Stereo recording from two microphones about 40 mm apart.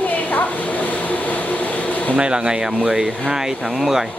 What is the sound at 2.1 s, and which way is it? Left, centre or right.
Speech, right.